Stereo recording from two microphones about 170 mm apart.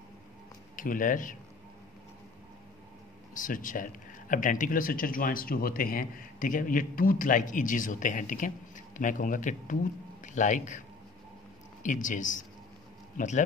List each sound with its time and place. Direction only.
0.7 s speech: 50° left (ahead or behind)
3.3 s a man's voice: 50° left (ahead or behind)
11.8 s speech: 50° left (ahead or behind)